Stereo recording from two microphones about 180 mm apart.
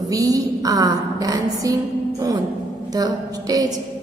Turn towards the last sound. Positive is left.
turn(degrees=-20)  # may be behind; listen again after turning